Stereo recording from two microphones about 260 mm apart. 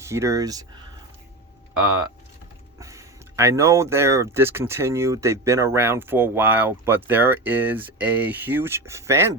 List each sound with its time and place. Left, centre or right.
0.0 s speech: centre
2.7 s speech: centre